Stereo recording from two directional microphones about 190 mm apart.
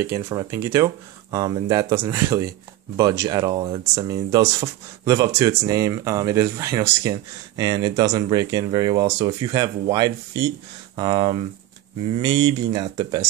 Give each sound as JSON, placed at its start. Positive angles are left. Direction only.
{"t": 0.0, "sound": "speech", "side_deg": -15}